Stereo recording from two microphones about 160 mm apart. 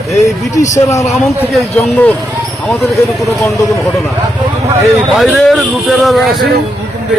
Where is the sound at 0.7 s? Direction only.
20° left (ahead or behind).